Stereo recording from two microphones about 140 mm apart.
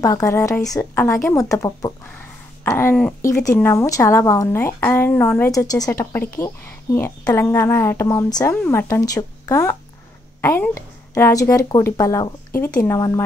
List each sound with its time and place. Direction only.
0.0 s a woman's voice: 25° left (ahead or behind)
5.5 s a woman's voice: 25° left (ahead or behind)